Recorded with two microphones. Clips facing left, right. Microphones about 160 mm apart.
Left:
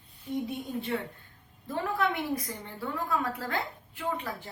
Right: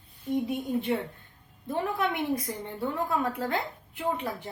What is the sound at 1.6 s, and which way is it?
A woman's voice, 20° right (ahead or behind).